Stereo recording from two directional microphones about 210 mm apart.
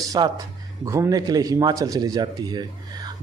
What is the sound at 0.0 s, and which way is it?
Speech, 15° right (ahead or behind).